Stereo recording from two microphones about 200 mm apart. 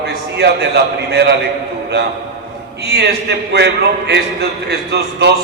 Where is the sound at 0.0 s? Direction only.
55° right (ahead or behind).